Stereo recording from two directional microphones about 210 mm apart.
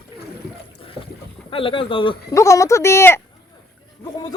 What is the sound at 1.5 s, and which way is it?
Speech, 25° left (ahead or behind).